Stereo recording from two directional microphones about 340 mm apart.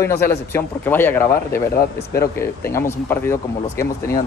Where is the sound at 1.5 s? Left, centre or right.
Left.